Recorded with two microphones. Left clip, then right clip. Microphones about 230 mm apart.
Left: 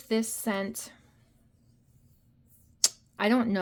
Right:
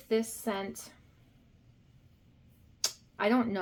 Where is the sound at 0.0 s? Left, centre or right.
Left.